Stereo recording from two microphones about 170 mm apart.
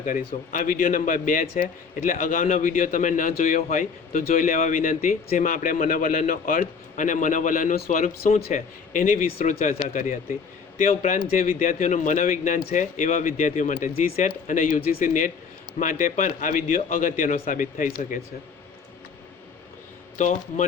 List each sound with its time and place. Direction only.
0.5 s a man's voice: 55° left (ahead or behind)
20.1 s a man's voice: 45° left (ahead or behind)